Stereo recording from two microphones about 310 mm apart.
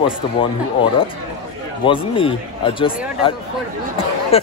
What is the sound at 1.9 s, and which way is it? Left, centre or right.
Speech, centre.